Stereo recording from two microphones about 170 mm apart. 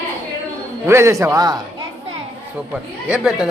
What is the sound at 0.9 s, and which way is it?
Speech, 15° right (ahead or behind).